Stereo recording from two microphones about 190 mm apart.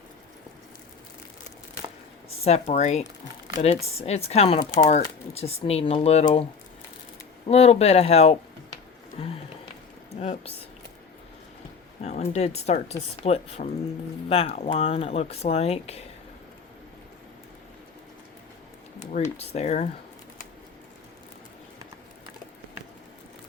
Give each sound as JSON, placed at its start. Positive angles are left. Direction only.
{"t": 2.4, "sound": "speech", "side_deg": 35}
{"t": 9.1, "sound": "a sound", "side_deg": 30}
{"t": 10.2, "sound": "speech", "side_deg": 35}
{"t": 12.0, "sound": "speech", "side_deg": 35}
{"t": 18.9, "sound": "speech", "side_deg": 40}